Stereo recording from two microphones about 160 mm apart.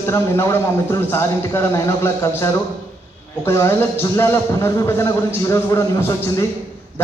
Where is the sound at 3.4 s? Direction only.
15° left (ahead or behind).